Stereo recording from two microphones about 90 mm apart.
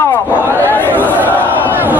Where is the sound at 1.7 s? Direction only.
20° right (ahead or behind).